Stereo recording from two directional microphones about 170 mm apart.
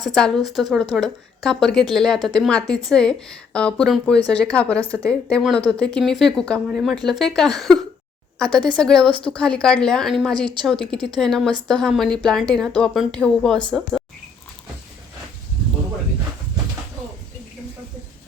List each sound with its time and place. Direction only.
0.0 s a woman's voice: centre (ahead or behind)
10.3 s speech: 25° right (ahead or behind)
11.2 s speech: centre (ahead or behind)